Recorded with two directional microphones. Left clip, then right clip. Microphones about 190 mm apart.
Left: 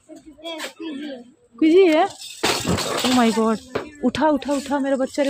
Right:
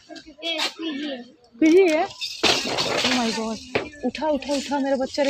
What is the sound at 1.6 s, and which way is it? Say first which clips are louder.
Speech: left 2 dB; 20° left (ahead or behind).